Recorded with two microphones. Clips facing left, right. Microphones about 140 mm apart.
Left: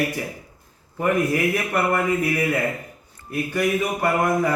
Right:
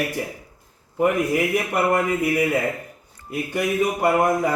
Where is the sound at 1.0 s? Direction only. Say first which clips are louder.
Right 1 dB; 15° right (ahead or behind).